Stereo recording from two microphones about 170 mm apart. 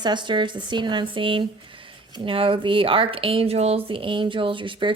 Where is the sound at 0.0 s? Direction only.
25° right (ahead or behind).